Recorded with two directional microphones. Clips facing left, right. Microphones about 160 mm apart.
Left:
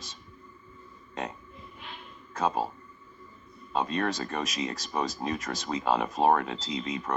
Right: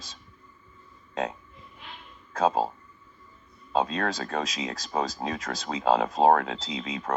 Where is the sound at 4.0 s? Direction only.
90° right.